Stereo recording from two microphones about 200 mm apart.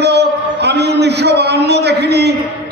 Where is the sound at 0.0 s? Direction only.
55° right (ahead or behind).